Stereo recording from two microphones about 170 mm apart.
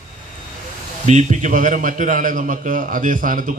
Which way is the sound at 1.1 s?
45° right (ahead or behind).